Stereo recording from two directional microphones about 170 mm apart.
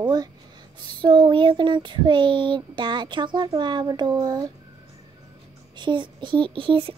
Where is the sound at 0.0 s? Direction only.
25° right (ahead or behind).